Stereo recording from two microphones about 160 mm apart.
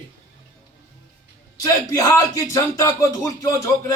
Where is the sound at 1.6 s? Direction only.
20° left (ahead or behind).